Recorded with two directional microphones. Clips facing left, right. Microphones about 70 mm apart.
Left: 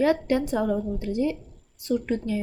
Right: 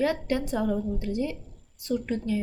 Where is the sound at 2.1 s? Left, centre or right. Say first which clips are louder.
Left 1 dB; left.